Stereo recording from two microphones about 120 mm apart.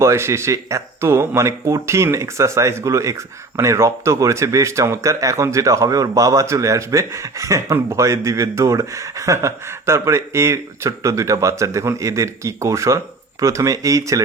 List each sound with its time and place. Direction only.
0.0 s speech: 25° right (ahead or behind)